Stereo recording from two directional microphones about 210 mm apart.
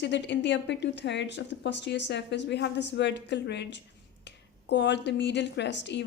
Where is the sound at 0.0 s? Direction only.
55° left (ahead or behind).